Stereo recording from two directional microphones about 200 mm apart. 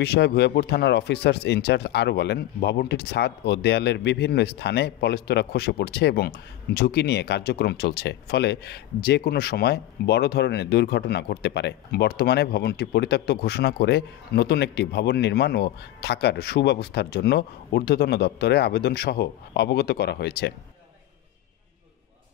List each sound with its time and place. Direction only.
0.0 s speech: 55° left (ahead or behind)